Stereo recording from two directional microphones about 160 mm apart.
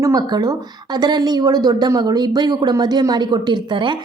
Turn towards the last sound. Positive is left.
turn(degrees=-30)  # may be behind; listen again after turning